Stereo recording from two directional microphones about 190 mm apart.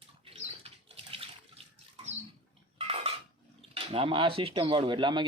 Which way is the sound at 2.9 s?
30° right (ahead or behind).